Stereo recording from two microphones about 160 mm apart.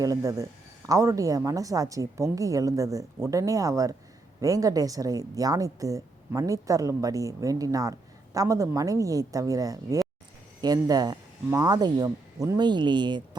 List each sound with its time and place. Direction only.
0.0 s a woman's voice: 20° right (ahead or behind)